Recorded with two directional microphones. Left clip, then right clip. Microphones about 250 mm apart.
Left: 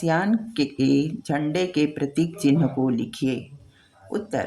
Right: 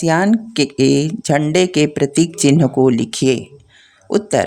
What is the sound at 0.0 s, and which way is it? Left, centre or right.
Speech, right.